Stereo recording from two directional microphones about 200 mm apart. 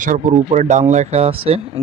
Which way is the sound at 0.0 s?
40° right (ahead or behind).